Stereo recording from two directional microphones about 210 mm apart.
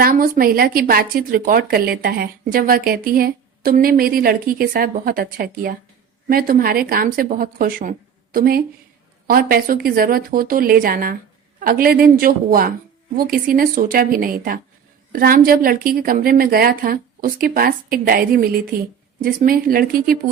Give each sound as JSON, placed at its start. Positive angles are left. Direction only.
{"t": 0.0, "sound": "speech", "side_deg": -45}